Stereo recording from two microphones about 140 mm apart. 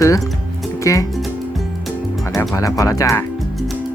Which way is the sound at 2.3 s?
25° left (ahead or behind).